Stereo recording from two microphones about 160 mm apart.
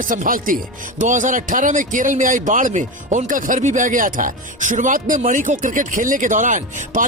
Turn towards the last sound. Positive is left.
turn(degrees=-50)  # may be behind; listen again after turning